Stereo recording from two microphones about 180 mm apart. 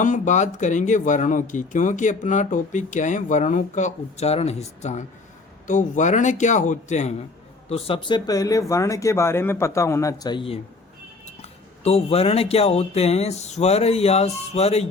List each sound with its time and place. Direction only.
0.0 s speech: 45° left (ahead or behind)
7.7 s speech: 30° left (ahead or behind)
11.8 s speech: 35° left (ahead or behind)